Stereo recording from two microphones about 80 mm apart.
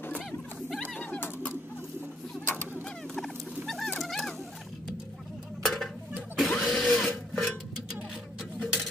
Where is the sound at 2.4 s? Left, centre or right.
Left.